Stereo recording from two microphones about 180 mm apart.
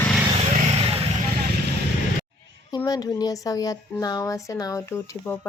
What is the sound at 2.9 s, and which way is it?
A woman's voice, 20° left (ahead or behind).